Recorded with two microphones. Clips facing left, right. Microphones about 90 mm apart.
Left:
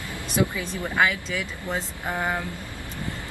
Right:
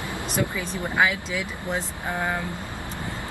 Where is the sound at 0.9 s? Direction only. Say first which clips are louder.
Even; 5° right (ahead or behind).